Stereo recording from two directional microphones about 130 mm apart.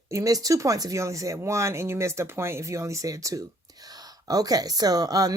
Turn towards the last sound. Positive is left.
turn(degrees=-30)  # may be behind; listen again after turning